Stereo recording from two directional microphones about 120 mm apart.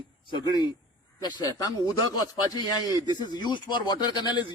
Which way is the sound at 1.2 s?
30° left (ahead or behind).